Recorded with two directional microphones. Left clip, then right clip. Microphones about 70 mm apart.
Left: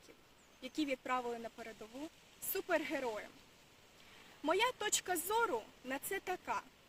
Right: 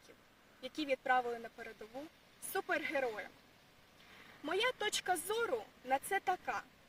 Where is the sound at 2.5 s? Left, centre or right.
Left.